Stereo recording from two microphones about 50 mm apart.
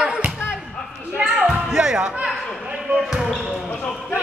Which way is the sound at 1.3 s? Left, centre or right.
Centre.